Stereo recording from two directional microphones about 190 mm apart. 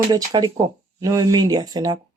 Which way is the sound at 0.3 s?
20° right (ahead or behind).